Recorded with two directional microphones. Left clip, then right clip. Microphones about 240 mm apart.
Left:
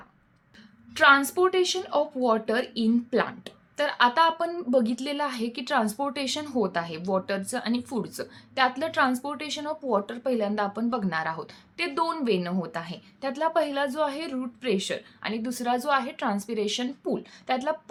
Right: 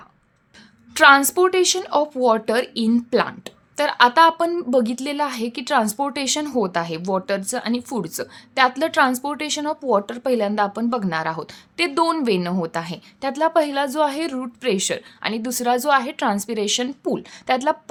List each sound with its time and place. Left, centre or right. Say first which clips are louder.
0.9 s speech: right 6 dB; right